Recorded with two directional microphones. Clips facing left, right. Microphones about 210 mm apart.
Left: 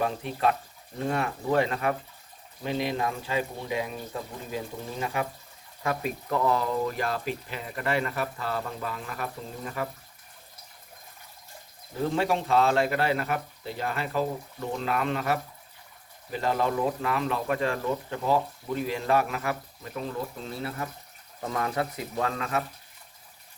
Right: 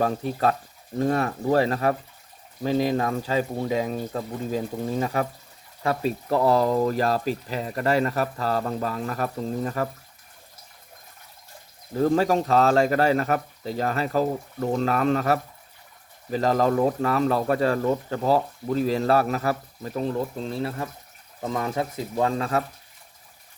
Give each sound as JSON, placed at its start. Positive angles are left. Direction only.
{"t": 0.0, "sound": "speech", "side_deg": -40}
{"t": 12.0, "sound": "speech", "side_deg": -40}